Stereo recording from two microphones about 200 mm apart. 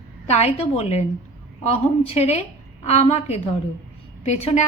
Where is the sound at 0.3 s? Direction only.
30° left (ahead or behind).